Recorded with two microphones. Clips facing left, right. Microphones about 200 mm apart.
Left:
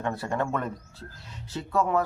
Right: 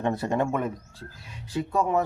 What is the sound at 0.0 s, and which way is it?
Speech, 20° right (ahead or behind).